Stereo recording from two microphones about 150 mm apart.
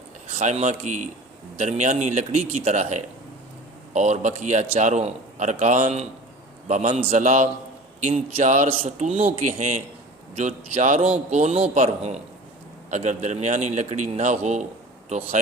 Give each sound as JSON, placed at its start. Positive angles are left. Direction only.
{"t": 0.3, "sound": "a man's voice", "side_deg": -50}
{"t": 9.5, "sound": "a man's voice", "side_deg": -55}